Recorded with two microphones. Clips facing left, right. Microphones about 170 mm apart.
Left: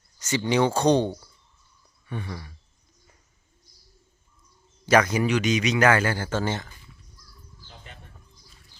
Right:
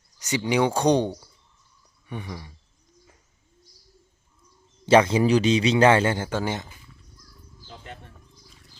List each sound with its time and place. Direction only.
0.2 s speech: 15° right (ahead or behind)
4.9 s speech: 25° right (ahead or behind)